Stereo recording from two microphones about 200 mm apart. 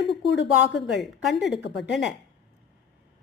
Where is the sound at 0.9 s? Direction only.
Centre (ahead or behind).